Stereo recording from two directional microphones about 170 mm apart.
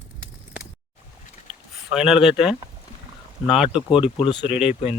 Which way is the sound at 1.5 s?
5° right (ahead or behind).